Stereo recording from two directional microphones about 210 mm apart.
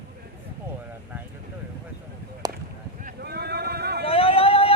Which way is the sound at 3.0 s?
45° right (ahead or behind).